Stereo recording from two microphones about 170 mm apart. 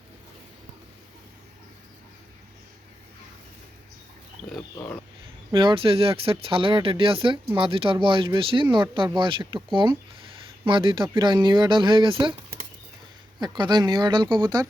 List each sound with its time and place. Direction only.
5.5 s speech: 30° right (ahead or behind)
10.7 s speech: 30° right (ahead or behind)
13.4 s speech: 25° right (ahead or behind)